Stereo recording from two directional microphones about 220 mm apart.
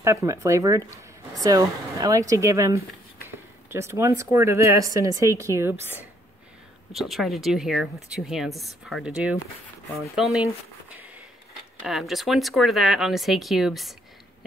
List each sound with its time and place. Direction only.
0.0 s speech: 15° right (ahead or behind)
10.9 s a sound: 5° right (ahead or behind)
11.8 s speech: centre (ahead or behind)